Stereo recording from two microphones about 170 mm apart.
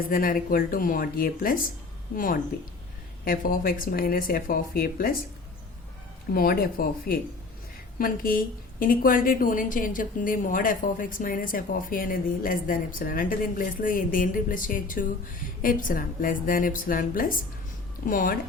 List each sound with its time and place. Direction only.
0.1 s speech: 55° left (ahead or behind)
6.3 s a woman's voice: 60° left (ahead or behind)